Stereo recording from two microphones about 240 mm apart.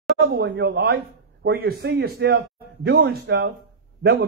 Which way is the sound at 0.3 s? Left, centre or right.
Right.